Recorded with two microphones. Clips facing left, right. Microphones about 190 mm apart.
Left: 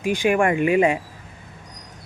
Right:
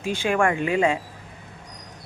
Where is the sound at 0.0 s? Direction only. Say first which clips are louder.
Left 3 dB; 15° left (ahead or behind).